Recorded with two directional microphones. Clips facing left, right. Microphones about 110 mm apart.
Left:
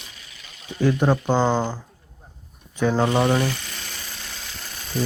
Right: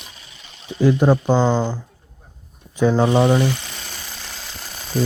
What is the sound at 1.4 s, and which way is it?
Speech, 10° left (ahead or behind).